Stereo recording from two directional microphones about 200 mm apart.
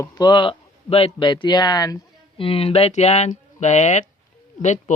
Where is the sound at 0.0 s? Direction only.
20° left (ahead or behind).